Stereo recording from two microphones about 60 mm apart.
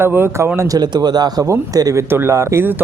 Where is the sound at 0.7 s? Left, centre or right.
Right.